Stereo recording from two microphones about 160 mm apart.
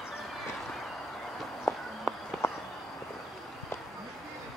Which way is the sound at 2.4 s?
15° left (ahead or behind).